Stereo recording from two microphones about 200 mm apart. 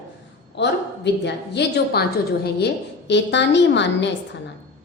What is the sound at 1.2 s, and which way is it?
A woman's voice, 55° left (ahead or behind).